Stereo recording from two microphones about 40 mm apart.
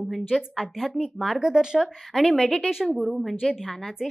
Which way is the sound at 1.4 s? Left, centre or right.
Centre.